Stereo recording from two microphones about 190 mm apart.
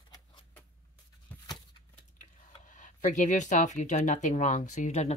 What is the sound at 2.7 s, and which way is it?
Speech, 40° left (ahead or behind).